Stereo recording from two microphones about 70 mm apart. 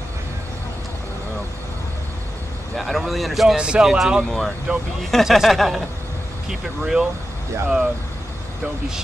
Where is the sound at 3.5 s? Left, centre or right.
Centre.